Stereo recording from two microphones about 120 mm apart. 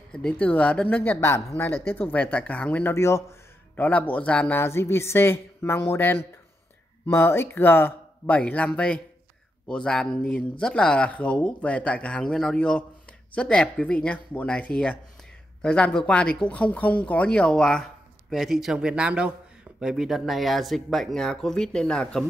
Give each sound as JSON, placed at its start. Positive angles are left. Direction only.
{"t": 0.1, "sound": "speech", "side_deg": 5}